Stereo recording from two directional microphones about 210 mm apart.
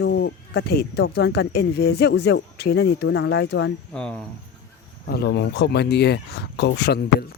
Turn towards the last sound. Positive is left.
turn(degrees=50)  # may be behind; listen again after turning